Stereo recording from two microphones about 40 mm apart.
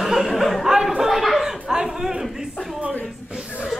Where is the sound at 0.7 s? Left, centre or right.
Centre.